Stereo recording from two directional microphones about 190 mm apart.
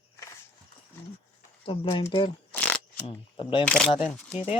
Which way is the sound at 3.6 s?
5° left (ahead or behind).